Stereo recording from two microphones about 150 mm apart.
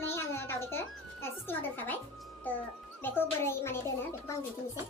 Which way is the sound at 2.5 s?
10° left (ahead or behind).